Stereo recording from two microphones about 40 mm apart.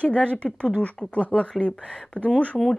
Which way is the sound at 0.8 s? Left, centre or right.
Left.